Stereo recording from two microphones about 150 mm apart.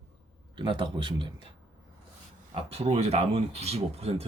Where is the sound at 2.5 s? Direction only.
40° right (ahead or behind).